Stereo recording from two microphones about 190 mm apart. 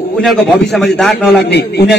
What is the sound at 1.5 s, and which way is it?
Speech, 60° left (ahead or behind).